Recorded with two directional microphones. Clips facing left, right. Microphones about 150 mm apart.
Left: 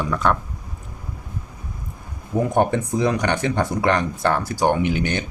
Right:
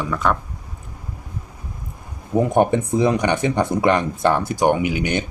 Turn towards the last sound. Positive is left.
turn(degrees=-10)  # may be behind; listen again after turning